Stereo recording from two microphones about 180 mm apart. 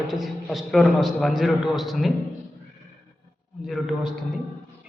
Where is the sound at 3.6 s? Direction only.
Centre (ahead or behind).